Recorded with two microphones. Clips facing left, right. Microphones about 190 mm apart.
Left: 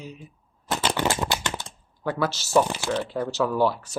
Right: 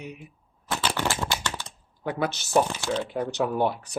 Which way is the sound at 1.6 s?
20° right (ahead or behind).